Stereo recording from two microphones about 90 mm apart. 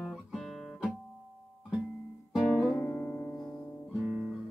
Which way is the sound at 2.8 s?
20° left (ahead or behind).